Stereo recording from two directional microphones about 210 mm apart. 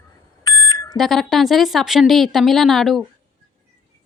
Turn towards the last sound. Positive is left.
turn(degrees=0)  # may be behind; listen again after turning